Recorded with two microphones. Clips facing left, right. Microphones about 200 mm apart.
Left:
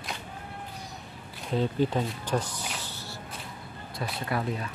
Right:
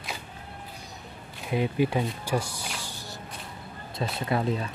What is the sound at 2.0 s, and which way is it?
Music, 10° right (ahead or behind).